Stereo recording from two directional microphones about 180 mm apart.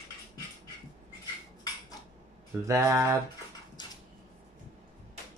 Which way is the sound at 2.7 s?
15° right (ahead or behind).